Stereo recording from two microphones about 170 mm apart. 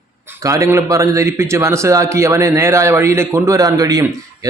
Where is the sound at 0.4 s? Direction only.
20° right (ahead or behind).